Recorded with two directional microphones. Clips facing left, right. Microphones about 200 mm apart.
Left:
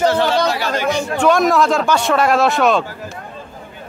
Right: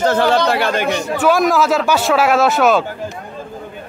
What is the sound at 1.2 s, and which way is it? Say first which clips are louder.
Speech: even; 5° right (ahead or behind).